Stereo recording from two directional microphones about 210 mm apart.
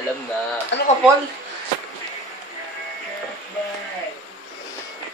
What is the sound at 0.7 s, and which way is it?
Speech, 55° left (ahead or behind).